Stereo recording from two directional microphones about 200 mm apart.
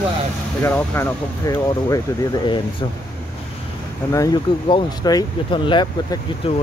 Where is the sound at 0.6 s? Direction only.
10° left (ahead or behind).